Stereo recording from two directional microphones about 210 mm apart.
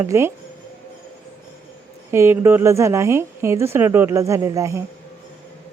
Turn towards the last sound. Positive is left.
turn(degrees=-15)  # may be behind; listen again after turning